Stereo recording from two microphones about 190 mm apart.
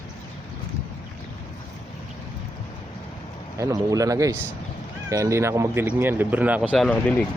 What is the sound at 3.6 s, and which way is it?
Speech, 15° right (ahead or behind).